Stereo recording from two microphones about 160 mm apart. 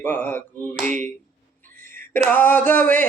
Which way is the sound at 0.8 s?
50° right (ahead or behind).